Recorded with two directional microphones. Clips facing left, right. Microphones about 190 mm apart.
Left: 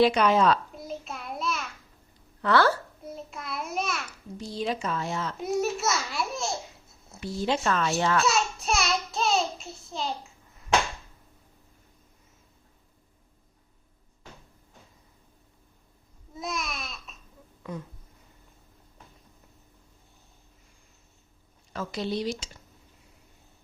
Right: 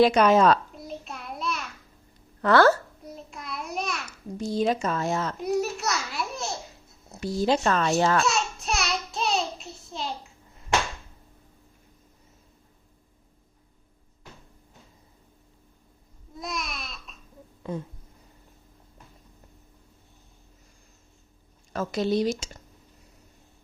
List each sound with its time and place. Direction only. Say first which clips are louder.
0.0 s speech: right 3 dB; 45° right (ahead or behind)
0.8 s child singing: left 1 dB; centre (ahead or behind)
2.4 s speech: right 4 dB; 45° right (ahead or behind)
3.0 s a sound: left 2 dB; centre (ahead or behind)
4.4 s speech: right 6 dB; 45° right (ahead or behind)
5.4 s a child's voice: even; centre (ahead or behind)
7.2 s a child's voice: right 4 dB; 40° right (ahead or behind)
8.3 s child singing: left 1 dB; centre (ahead or behind)
16.3 s babbling: left 1 dB; centre (ahead or behind)
17.6 s a sound: right 4 dB; 30° right (ahead or behind)
21.7 s speech: right 5 dB; 45° right (ahead or behind)